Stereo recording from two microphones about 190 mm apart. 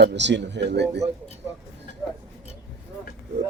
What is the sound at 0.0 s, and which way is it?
Speech, 65° right (ahead or behind).